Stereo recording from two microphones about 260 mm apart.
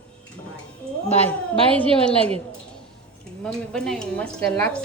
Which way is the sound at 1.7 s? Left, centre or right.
Centre.